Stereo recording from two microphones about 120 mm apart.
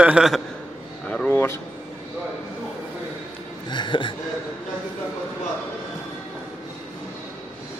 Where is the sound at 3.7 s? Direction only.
40° left (ahead or behind).